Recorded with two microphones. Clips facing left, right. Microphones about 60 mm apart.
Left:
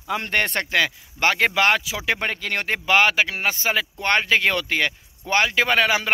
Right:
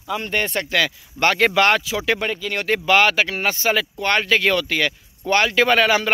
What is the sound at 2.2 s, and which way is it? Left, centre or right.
Speech, left.